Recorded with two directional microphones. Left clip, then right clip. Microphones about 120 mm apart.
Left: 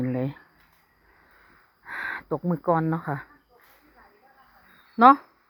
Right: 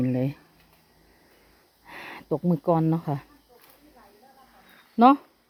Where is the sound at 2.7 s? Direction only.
25° right (ahead or behind).